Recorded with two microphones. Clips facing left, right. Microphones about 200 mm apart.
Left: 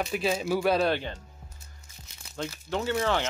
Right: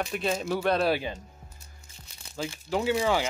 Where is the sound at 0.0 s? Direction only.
Centre (ahead or behind).